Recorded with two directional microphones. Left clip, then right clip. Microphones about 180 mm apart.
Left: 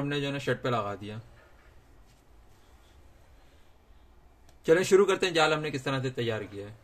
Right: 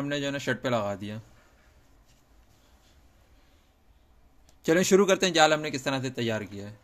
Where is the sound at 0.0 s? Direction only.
45° right (ahead or behind).